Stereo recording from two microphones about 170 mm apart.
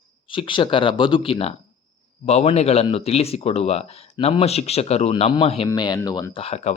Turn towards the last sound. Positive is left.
turn(degrees=35)  # may be behind; listen again after turning